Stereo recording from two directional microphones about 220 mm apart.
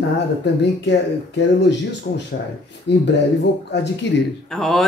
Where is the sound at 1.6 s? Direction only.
50° left (ahead or behind).